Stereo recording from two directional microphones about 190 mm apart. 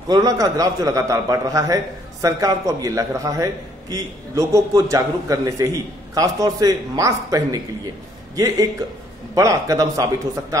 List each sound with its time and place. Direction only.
0.1 s a man's voice: 20° right (ahead or behind)